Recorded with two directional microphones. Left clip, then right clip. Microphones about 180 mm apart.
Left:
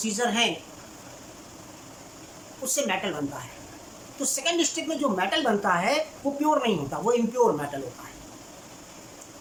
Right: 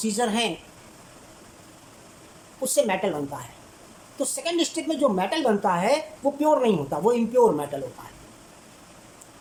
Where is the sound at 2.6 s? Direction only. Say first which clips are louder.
Right 4 dB; 25° right (ahead or behind).